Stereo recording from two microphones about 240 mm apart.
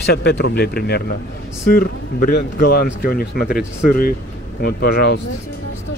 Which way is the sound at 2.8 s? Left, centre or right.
Left.